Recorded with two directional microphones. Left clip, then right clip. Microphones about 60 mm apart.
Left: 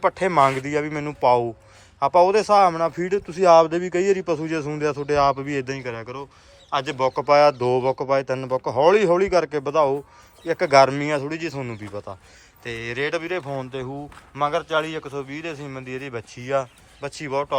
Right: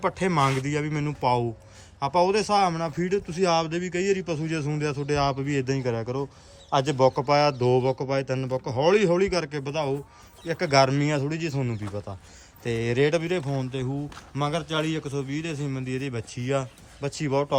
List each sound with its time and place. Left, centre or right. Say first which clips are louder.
0.0 s speech: left 6 dB; right
5.6 s speech: right 2 dB; right
7.2 s speech: left 6 dB; right
10.5 s speech: left 5 dB; right
12.6 s speech: right 3 dB; right
13.1 s speech: right 1 dB; right
13.4 s a man's voice: left 2 dB; centre
17.1 s speech: left 1 dB; right